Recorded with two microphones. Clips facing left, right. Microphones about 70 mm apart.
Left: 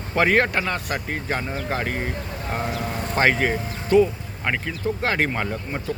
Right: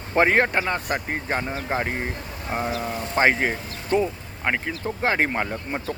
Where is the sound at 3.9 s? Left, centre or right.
Right.